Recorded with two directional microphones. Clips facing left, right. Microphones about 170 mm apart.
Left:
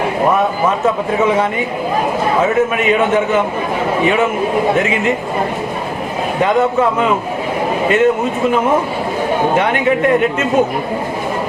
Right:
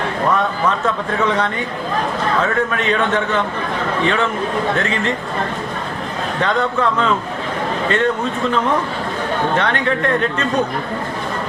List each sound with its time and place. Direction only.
0.2 s a man's voice: 20° left (ahead or behind)
6.4 s a man's voice: 15° left (ahead or behind)